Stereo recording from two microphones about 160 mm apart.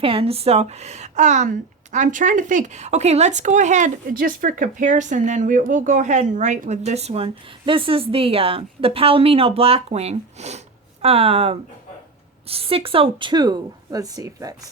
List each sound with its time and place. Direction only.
0.0 s a woman's voice: 35° right (ahead or behind)